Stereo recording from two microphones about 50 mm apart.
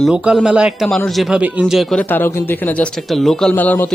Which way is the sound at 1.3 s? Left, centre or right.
Right.